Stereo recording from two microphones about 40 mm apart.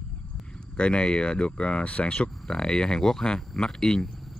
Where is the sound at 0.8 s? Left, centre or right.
Left.